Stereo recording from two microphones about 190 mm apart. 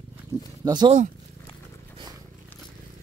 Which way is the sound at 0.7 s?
25° right (ahead or behind).